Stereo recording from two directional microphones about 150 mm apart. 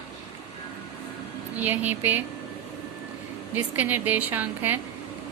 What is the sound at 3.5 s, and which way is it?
A woman's voice, 10° right (ahead or behind).